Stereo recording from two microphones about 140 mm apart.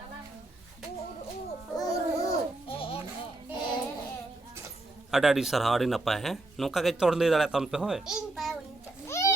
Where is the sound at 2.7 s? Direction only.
40° left (ahead or behind).